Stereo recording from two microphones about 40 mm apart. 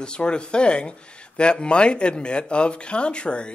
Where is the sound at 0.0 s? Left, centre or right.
Left.